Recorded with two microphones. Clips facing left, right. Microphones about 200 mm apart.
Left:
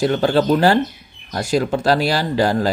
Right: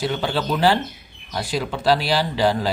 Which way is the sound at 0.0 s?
45° left (ahead or behind).